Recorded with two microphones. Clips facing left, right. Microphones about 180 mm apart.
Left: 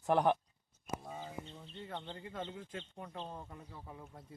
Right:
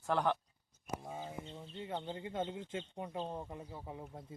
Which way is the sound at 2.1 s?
20° right (ahead or behind).